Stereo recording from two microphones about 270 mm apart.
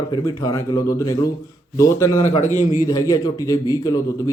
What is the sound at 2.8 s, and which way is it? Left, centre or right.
Speech, centre.